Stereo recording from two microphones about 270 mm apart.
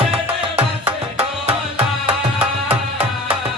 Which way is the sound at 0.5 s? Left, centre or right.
Centre.